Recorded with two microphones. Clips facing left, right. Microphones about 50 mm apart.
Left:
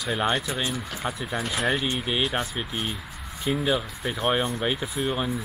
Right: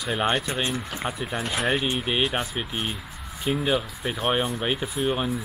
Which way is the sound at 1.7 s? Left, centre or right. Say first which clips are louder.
Right 1 dB; centre.